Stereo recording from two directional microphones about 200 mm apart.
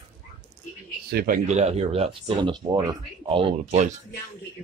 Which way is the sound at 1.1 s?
45° right (ahead or behind).